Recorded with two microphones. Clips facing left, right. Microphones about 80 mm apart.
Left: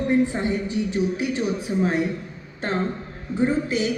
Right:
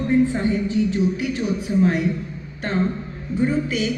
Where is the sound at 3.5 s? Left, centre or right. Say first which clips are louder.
Even; left.